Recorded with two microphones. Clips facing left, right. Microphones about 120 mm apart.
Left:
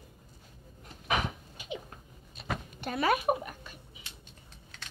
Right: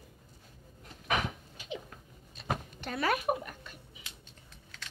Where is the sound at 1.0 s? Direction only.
10° left (ahead or behind).